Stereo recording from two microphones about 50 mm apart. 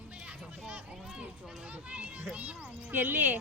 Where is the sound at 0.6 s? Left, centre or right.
Right.